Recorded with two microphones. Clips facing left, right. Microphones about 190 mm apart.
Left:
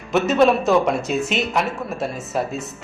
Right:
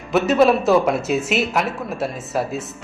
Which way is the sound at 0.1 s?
Centre (ahead or behind).